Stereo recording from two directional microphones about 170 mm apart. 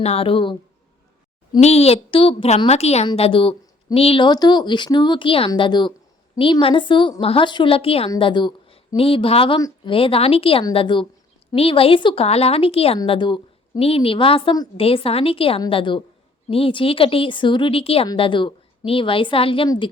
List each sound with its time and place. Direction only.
0.0 s a woman's voice: 35° left (ahead or behind)
1.6 s a woman's voice: 35° left (ahead or behind)